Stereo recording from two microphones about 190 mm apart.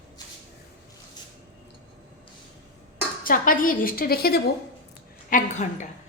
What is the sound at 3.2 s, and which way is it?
Speech, 45° left (ahead or behind).